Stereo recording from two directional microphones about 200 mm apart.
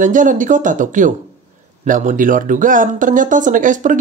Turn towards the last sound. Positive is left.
turn(degrees=-40)  # may be behind; listen again after turning